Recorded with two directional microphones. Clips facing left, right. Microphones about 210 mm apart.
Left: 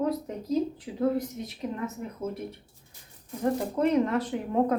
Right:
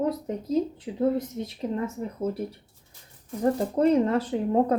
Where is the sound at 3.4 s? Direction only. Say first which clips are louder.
Right 3 dB; 35° right (ahead or behind).